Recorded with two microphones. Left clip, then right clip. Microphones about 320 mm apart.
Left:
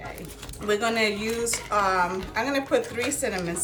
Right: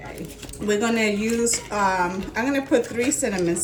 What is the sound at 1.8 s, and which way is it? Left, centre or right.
Speech, left.